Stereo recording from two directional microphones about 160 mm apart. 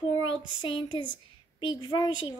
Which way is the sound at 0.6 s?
30° left (ahead or behind).